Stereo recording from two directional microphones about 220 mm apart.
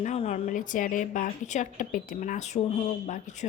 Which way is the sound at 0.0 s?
30° left (ahead or behind).